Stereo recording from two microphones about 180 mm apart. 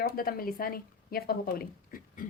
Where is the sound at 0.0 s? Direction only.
55° left (ahead or behind).